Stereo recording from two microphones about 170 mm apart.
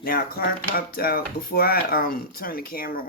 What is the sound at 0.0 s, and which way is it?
Speech, 60° left (ahead or behind).